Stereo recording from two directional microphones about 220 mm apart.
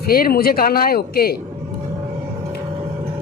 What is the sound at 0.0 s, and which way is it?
Speech, 45° left (ahead or behind).